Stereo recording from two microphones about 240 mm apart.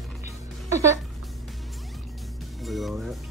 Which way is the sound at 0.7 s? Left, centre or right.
Centre.